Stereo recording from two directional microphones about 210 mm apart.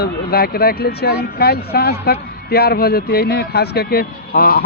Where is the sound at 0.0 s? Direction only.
45° left (ahead or behind).